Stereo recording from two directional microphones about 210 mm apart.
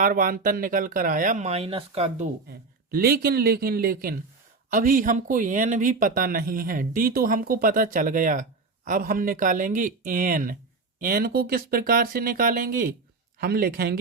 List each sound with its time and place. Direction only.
0.0 s speech: 40° right (ahead or behind)
2.5 s speech: 45° right (ahead or behind)